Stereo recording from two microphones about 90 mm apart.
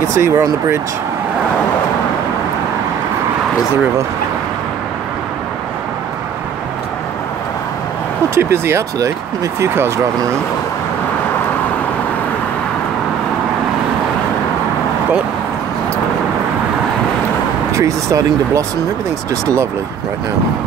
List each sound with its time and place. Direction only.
0.1 s speech: 35° right (ahead or behind)
8.4 s speech: 30° right (ahead or behind)
17.7 s speech: 35° right (ahead or behind)